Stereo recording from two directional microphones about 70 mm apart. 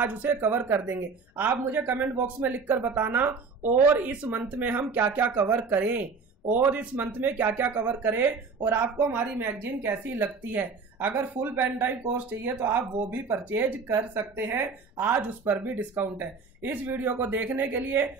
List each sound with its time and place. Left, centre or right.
0.0 s a woman's voice: right
5.6 s a woman's voice: right